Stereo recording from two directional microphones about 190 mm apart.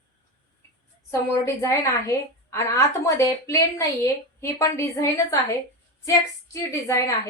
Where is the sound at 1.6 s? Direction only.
15° left (ahead or behind).